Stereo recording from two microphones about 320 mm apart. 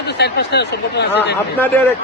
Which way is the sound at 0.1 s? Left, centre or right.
Left.